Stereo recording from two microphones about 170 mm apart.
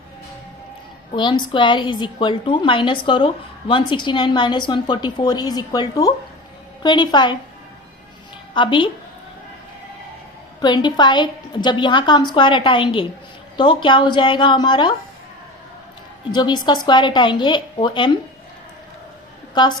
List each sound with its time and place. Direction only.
1.1 s a woman's voice: 25° left (ahead or behind)
8.5 s a woman's voice: 30° left (ahead or behind)
10.6 s a woman's voice: 25° left (ahead or behind)
16.3 s a woman's voice: 25° left (ahead or behind)
19.6 s a woman's voice: 25° left (ahead or behind)